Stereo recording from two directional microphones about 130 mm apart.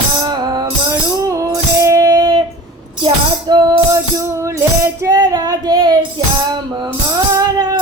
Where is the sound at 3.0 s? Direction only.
35° right (ahead or behind).